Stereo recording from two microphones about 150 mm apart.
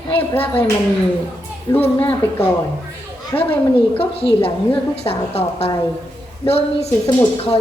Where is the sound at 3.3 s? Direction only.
20° left (ahead or behind).